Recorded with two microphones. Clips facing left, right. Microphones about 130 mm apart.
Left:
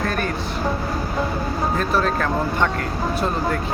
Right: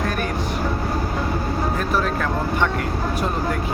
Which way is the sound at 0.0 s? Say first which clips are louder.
Even; 15° right (ahead or behind).